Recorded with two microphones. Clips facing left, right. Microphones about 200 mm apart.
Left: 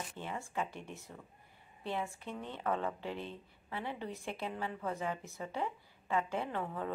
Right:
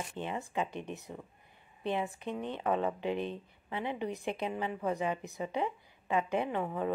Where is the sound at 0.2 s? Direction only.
20° right (ahead or behind).